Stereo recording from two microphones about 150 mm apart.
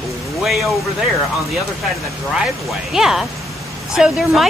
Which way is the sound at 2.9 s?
5° right (ahead or behind).